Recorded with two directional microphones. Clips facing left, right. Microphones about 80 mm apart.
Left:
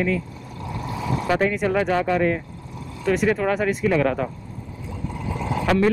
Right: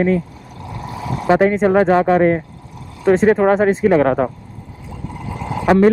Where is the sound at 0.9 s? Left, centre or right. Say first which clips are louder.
Right 7 dB; right.